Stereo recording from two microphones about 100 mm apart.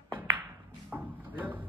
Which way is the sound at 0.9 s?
15° right (ahead or behind).